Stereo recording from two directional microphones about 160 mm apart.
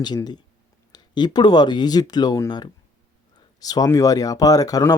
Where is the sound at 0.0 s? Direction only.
25° left (ahead or behind).